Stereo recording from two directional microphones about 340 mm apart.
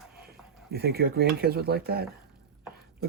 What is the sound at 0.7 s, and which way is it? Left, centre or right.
Speech, right.